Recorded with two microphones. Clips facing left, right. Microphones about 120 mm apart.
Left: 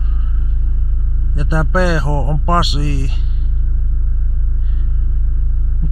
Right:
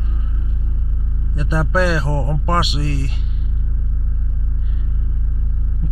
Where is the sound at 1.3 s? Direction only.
30° left (ahead or behind).